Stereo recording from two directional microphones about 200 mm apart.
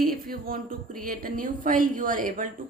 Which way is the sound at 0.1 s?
45° right (ahead or behind).